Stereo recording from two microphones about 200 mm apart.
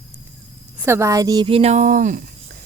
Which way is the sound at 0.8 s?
15° right (ahead or behind).